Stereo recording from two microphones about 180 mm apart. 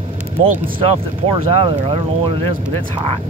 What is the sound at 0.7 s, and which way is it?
Speech, 30° right (ahead or behind).